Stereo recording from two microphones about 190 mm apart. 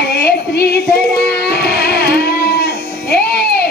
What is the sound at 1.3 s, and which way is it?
Music, 55° left (ahead or behind).